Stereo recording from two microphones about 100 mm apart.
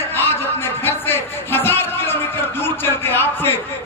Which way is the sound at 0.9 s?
20° left (ahead or behind).